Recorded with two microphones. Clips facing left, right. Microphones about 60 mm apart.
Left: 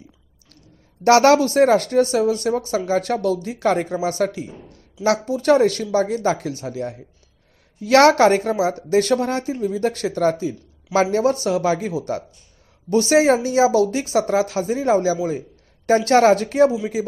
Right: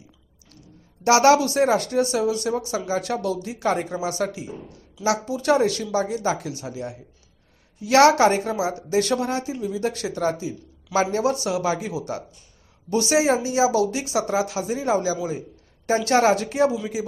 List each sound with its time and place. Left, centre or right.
1.0 s speech: left